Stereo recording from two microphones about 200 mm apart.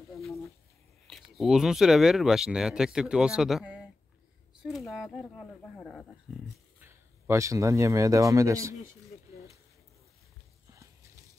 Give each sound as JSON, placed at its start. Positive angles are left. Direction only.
{"t": 0.1, "sound": "a sound", "side_deg": 0}
{"t": 1.0, "sound": "speech", "side_deg": 0}
{"t": 6.8, "sound": "speech", "side_deg": -15}